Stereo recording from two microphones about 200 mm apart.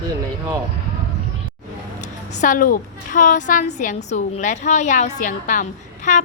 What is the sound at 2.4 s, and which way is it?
A woman's voice, 40° left (ahead or behind).